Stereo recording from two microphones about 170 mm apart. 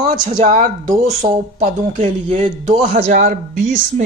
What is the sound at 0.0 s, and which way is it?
Speech, 45° right (ahead or behind).